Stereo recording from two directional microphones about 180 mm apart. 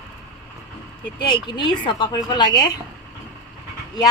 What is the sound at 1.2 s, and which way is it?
A woman's voice, 25° left (ahead or behind).